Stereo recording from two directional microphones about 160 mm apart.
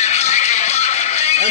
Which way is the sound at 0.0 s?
45° left (ahead or behind).